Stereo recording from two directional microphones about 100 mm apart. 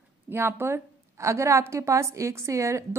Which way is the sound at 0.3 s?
20° right (ahead or behind).